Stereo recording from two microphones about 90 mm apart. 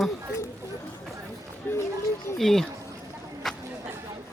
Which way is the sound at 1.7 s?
25° left (ahead or behind).